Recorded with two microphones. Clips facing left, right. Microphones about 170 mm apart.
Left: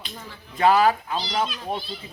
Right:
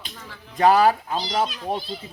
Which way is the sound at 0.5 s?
40° right (ahead or behind).